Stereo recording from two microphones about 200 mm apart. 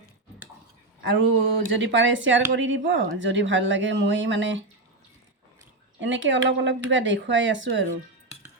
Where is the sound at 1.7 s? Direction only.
65° right (ahead or behind).